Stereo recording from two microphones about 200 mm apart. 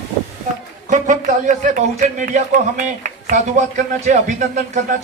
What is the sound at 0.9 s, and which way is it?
Speech, 40° right (ahead or behind).